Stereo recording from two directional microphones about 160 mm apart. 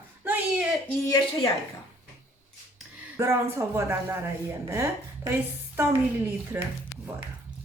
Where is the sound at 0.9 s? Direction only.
20° left (ahead or behind).